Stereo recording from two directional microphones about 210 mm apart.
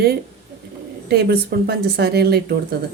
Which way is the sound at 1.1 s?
50° right (ahead or behind).